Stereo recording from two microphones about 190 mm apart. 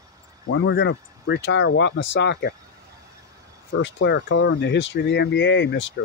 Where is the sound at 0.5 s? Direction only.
70° left (ahead or behind).